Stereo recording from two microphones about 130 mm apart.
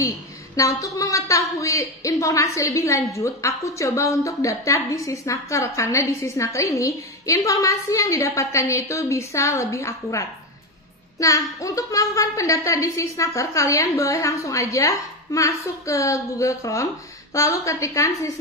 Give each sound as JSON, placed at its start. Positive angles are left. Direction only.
{"t": 0.6, "sound": "a woman's voice", "side_deg": 25}